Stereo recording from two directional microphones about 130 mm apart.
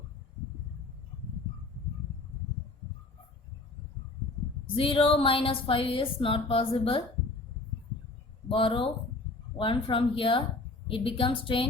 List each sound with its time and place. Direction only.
4.6 s a woman's voice: 45° left (ahead or behind)
8.4 s a woman's voice: 45° left (ahead or behind)